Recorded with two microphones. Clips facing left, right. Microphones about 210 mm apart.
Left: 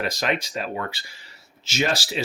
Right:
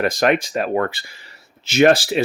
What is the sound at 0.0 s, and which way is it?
Speech, 55° right (ahead or behind).